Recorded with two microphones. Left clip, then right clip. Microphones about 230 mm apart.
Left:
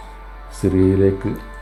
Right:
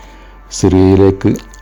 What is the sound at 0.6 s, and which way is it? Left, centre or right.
Speech, right.